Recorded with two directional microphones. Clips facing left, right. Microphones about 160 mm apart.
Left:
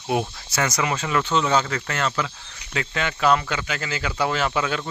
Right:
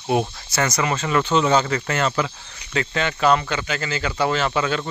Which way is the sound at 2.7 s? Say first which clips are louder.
Right 3 dB; 5° left (ahead or behind).